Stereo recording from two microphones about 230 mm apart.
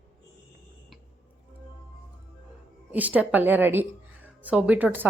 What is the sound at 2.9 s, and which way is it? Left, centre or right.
A woman's voice, centre.